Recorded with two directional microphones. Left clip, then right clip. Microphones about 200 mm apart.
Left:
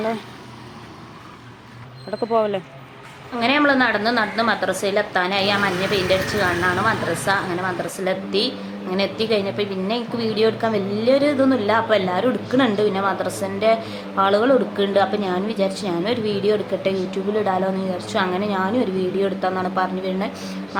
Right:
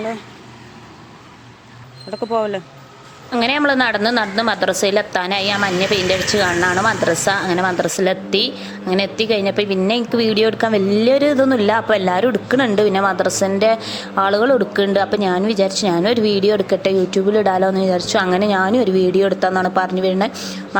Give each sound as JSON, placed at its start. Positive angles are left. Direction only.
{"t": 2.3, "sound": "speech", "side_deg": -10}
{"t": 3.3, "sound": "a woman's voice", "side_deg": -40}